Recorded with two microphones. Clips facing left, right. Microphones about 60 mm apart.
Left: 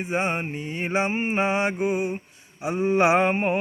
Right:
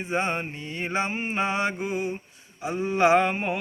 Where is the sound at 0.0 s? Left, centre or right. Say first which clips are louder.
Left 1 dB; centre.